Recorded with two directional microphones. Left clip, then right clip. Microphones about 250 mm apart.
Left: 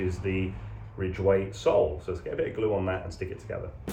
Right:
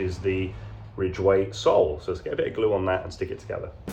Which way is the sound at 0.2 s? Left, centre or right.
Centre.